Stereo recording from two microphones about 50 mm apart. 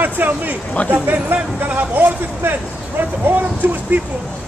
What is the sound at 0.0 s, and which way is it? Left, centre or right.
Speech, right.